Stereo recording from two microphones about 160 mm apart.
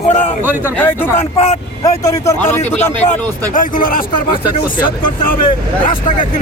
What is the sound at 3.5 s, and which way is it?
Speech, 60° left (ahead or behind).